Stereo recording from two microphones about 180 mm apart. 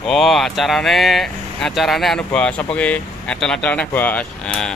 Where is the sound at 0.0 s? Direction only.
Centre (ahead or behind).